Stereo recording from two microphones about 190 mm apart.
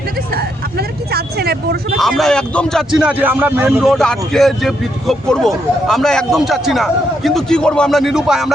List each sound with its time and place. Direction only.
0.3 s vehicle: 55° right (ahead or behind)
2.0 s a man's voice: centre (ahead or behind)